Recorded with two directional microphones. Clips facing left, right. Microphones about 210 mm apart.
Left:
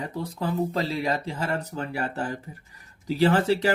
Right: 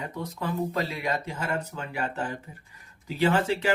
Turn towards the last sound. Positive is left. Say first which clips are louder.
# left 3 dB
turn(degrees=35)  # may be behind; listen again after turning